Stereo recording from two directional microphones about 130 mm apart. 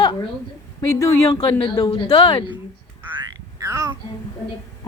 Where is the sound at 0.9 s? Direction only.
25° left (ahead or behind).